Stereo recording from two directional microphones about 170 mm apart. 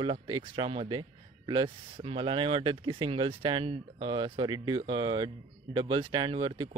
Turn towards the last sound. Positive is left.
turn(degrees=-30)  # may be behind; listen again after turning